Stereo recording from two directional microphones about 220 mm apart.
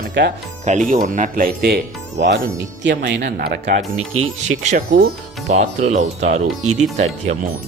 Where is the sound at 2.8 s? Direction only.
50° right (ahead or behind); by 7.3 s 30° right (ahead or behind).